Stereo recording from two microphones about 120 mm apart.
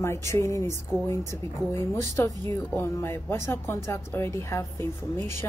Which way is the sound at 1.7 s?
20° left (ahead or behind).